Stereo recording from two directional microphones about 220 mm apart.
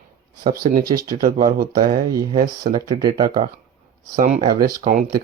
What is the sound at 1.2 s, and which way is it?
Speech, 40° right (ahead or behind).